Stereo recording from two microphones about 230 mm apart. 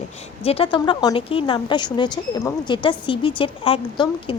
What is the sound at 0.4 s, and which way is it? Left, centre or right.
A woman's voice, left.